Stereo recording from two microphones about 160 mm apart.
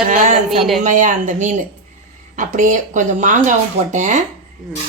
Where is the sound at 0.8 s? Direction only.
50° right (ahead or behind).